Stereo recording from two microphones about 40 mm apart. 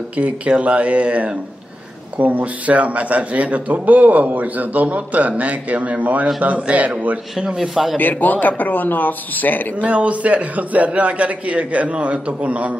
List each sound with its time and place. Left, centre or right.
0.1 s a man's voice: right
7.3 s speech: centre
8.0 s speech: left
9.8 s a man's voice: right